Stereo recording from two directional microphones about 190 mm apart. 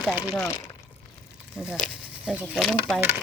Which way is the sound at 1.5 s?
5° right (ahead or behind).